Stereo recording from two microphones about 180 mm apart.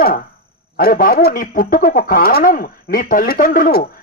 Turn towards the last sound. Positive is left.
turn(degrees=50)  # may be behind; listen again after turning